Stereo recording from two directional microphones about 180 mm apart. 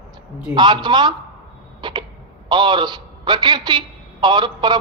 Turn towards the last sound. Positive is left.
turn(degrees=-25)  # may be behind; listen again after turning